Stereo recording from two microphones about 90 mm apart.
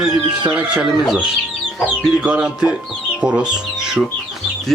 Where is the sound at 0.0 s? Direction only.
10° right (ahead or behind).